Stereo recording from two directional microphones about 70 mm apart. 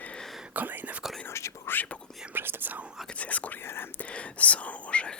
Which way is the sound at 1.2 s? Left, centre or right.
Left.